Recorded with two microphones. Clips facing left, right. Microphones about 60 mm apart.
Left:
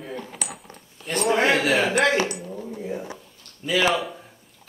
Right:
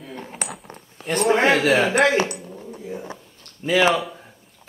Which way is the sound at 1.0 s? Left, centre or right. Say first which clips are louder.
Right 3 dB; centre.